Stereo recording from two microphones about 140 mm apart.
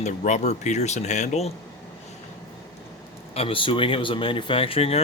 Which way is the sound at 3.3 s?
40° left (ahead or behind).